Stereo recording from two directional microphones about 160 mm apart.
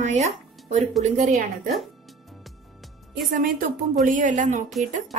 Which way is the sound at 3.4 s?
60° right (ahead or behind).